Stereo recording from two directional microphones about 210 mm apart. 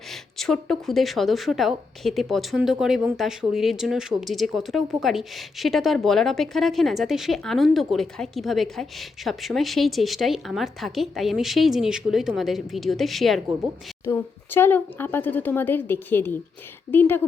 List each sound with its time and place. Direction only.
0.1 s speech: centre (ahead or behind)